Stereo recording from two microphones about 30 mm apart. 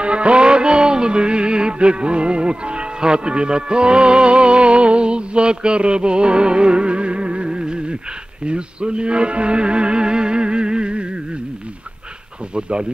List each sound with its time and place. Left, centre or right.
0.0 s music: right
12.5 s music: right